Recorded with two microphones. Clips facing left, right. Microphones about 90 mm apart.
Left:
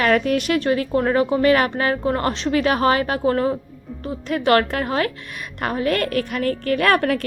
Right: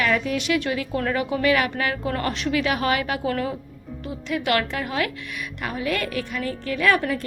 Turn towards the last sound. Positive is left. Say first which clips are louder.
# left 3 dB
turn(degrees=65)  # may be behind; listen again after turning